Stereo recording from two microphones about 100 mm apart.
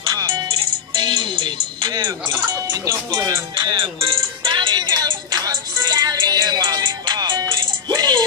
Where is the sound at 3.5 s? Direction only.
55° right (ahead or behind).